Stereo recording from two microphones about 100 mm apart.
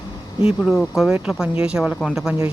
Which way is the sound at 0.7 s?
Centre (ahead or behind).